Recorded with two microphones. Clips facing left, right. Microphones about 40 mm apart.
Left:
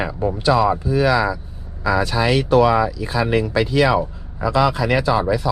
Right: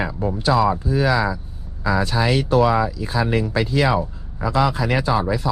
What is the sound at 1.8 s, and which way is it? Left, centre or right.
Speech, left.